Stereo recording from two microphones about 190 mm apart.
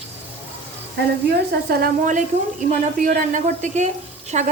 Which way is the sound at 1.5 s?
55° right (ahead or behind).